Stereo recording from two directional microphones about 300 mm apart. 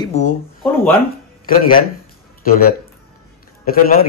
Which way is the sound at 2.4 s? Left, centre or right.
Left.